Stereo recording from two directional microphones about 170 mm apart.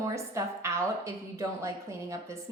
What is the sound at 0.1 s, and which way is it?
A woman's voice, 15° right (ahead or behind).